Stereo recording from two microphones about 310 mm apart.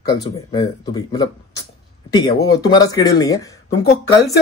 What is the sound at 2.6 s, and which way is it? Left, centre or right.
Speech, centre.